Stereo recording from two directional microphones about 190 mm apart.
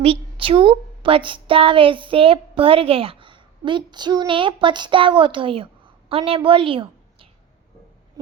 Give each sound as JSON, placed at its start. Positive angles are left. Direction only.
{"t": 0.0, "sound": "a woman's voice", "side_deg": -30}